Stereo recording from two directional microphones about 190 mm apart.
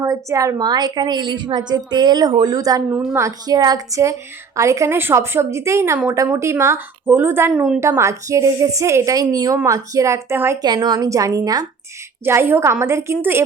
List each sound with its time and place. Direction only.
0.0 s a woman's voice: 15° right (ahead or behind)